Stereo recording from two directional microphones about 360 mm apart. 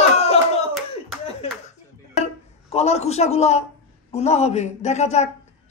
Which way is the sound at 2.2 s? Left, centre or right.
Centre.